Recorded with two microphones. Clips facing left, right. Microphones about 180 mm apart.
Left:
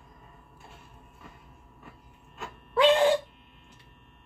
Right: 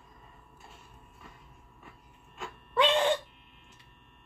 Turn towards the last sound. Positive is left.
turn(degrees=0)  # may be behind; listen again after turning